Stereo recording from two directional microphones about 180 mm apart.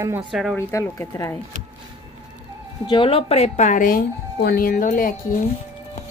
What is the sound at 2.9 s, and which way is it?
Speech, 30° left (ahead or behind).